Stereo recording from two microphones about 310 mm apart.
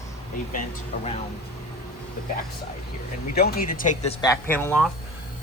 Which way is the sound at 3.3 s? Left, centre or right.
Left.